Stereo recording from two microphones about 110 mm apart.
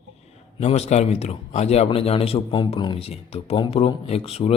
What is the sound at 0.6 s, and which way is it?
Speech, 80° left.